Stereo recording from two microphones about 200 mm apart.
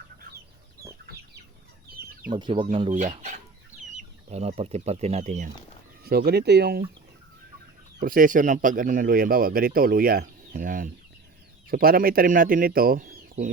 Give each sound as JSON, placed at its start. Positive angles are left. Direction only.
{"t": 0.8, "sound": "chicken", "side_deg": -50}
{"t": 2.3, "sound": "speech", "side_deg": -25}
{"t": 2.9, "sound": "speech", "side_deg": -40}
{"t": 6.1, "sound": "speech", "side_deg": -50}
{"t": 8.0, "sound": "speech", "side_deg": -45}